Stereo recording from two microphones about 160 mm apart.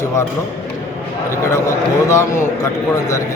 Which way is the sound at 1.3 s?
15° left (ahead or behind).